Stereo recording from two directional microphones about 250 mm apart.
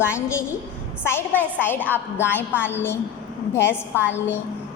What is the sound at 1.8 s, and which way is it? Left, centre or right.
Speech, centre.